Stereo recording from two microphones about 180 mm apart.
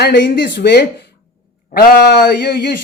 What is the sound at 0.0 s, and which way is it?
Speech, 60° left (ahead or behind).